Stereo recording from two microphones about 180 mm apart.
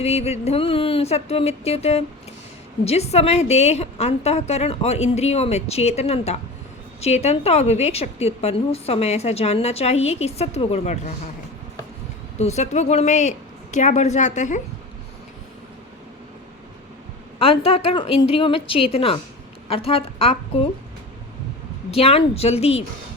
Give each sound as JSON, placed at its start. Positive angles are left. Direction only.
{"t": 0.0, "sound": "a woman's voice", "side_deg": 35}
{"t": 12.4, "sound": "a woman's voice", "side_deg": 40}
{"t": 17.4, "sound": "a woman's voice", "side_deg": 30}
{"t": 21.8, "sound": "a woman's voice", "side_deg": 35}